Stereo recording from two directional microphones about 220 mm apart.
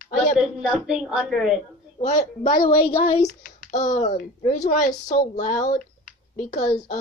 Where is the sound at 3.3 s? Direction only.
40° left (ahead or behind).